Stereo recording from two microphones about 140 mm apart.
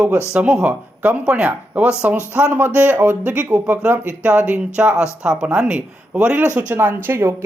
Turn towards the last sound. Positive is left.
turn(degrees=-15)  # may be behind; listen again after turning